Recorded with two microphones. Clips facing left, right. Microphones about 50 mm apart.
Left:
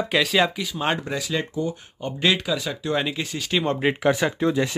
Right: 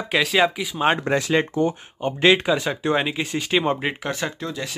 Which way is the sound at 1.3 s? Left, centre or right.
Right.